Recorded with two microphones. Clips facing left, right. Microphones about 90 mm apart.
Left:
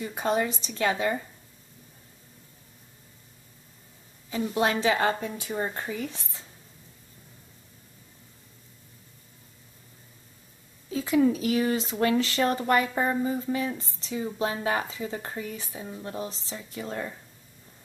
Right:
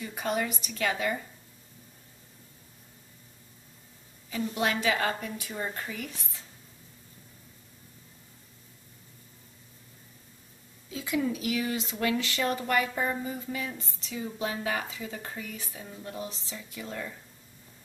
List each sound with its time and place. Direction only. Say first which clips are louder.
0.0 s a woman's voice: left 4 dB; 30° left (ahead or behind)
4.3 s a woman's voice: left 4 dB; 30° left (ahead or behind)
10.9 s speech: left 7 dB; 35° left (ahead or behind)